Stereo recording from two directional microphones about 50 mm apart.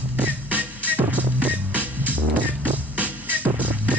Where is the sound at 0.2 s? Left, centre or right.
Right.